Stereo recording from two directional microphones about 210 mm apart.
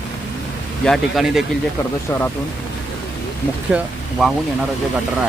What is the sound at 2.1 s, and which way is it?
Speech, 10° left (ahead or behind).